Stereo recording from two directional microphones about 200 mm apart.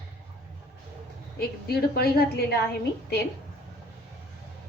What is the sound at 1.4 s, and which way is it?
A woman's voice, 50° left (ahead or behind).